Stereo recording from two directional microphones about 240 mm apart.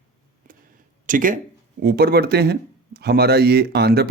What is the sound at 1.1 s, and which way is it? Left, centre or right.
Speech, right.